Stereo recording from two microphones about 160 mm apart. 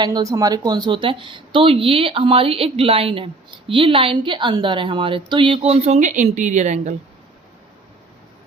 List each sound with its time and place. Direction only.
0.0 s speech: 25° right (ahead or behind); by 6.9 s 50° right (ahead or behind)